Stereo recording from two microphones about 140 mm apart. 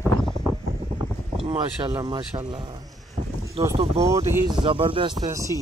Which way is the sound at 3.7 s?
45° right (ahead or behind).